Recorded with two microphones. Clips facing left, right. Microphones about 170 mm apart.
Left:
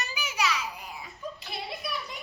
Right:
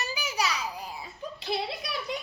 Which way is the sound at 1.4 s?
85° right.